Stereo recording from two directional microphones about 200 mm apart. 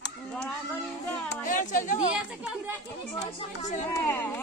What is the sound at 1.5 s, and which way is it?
Speech, 40° left (ahead or behind).